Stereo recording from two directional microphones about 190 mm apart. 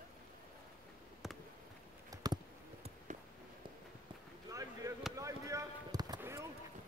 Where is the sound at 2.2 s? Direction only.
20° right (ahead or behind).